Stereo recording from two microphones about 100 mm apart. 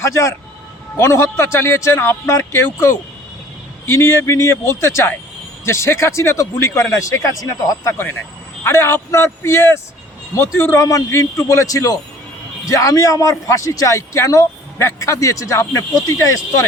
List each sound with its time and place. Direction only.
0.0 s speech: 30° left (ahead or behind)